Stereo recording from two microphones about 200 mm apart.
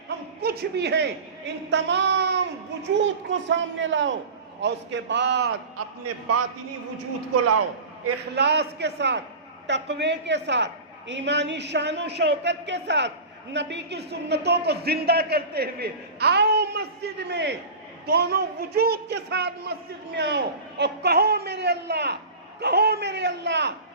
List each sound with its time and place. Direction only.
0.4 s a woman's voice: 55° right (ahead or behind); by 5.5 s 75° right (ahead or behind)
8.0 s a woman's voice: 60° right (ahead or behind)